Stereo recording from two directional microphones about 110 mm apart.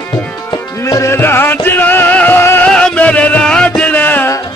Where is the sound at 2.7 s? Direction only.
10° left (ahead or behind).